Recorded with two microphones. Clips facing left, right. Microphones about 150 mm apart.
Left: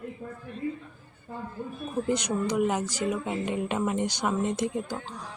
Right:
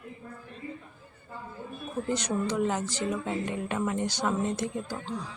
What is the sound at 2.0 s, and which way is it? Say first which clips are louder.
Speech: left 1 dB; 15° left (ahead or behind).